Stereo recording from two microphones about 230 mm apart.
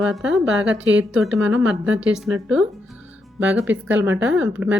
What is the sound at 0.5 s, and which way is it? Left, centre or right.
Speech, right.